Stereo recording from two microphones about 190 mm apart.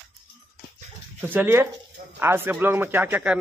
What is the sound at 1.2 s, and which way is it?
A man's voice, 10° right (ahead or behind).